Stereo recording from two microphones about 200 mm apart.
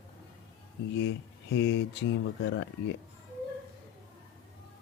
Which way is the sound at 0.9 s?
65° left (ahead or behind).